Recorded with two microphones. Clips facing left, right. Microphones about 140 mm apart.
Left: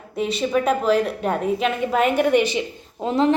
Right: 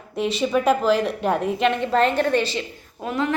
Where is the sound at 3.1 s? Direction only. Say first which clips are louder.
Left 5 dB; 30° left (ahead or behind).